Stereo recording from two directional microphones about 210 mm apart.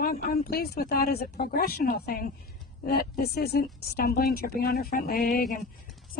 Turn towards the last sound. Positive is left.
turn(degrees=45)  # may be behind; listen again after turning